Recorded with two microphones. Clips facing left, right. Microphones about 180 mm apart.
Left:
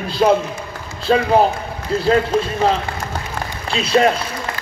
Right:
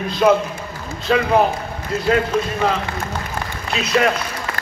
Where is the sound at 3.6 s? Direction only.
30° left (ahead or behind).